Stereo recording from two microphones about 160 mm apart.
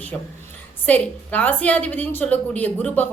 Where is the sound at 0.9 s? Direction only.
10° left (ahead or behind).